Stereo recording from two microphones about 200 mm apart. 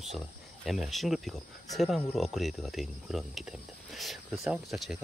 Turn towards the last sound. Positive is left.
turn(degrees=0)  # may be behind; listen again after turning